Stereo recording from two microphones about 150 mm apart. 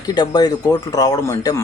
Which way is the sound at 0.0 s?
25° left (ahead or behind).